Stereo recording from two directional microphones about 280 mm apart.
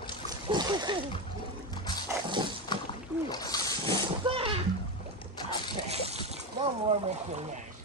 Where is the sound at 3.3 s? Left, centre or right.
Centre.